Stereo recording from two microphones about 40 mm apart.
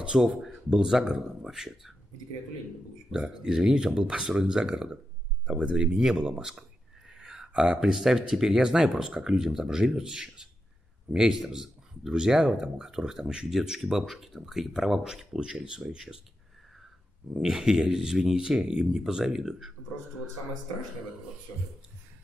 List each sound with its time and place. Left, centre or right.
0.0 s speech: centre
0.8 s speech: centre
3.1 s speech: centre
7.2 s a sound: centre
7.8 s speech: centre
17.6 s speech: centre